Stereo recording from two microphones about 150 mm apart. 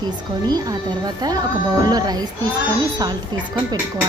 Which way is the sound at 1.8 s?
25° right (ahead or behind).